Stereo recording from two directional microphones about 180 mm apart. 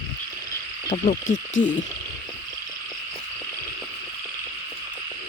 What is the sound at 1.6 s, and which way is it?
Frog, 90° left.